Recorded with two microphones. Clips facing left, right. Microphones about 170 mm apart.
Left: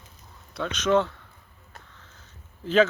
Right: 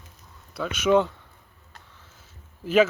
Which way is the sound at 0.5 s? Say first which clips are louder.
Right 2 dB; 5° right (ahead or behind).